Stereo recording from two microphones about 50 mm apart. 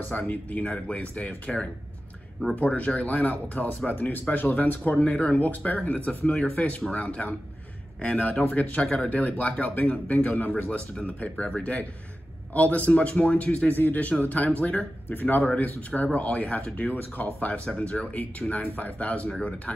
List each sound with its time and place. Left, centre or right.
0.3 s speech: left
2.5 s speech: left
15.0 s speech: left
15.4 s speech: left